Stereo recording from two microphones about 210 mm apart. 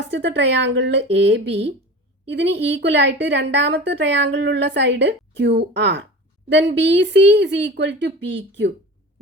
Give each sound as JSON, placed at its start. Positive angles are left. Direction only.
{"t": 0.1, "sound": "a woman's voice", "side_deg": -60}